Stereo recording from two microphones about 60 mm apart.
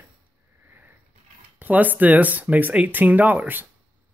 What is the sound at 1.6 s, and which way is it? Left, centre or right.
Speech, right.